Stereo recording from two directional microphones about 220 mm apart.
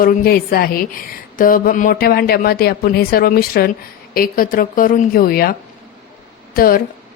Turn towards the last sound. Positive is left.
turn(degrees=40)  # may be behind; listen again after turning